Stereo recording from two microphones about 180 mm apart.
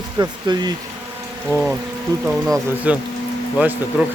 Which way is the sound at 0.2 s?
25° right (ahead or behind).